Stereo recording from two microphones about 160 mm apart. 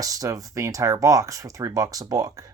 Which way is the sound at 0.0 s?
20° right (ahead or behind).